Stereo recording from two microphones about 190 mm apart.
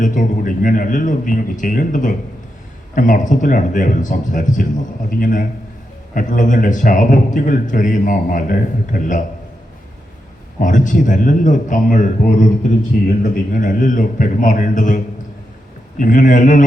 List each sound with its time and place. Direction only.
0.0 s a man's voice: 40° left (ahead or behind)
10.6 s a man's voice: 40° left (ahead or behind)
13.5 s a man's voice: 45° left (ahead or behind)